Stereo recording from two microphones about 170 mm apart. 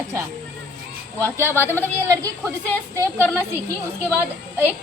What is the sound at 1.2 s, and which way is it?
Speech, 15° right (ahead or behind).